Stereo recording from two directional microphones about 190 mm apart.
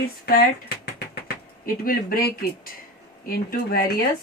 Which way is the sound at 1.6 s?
50° left (ahead or behind).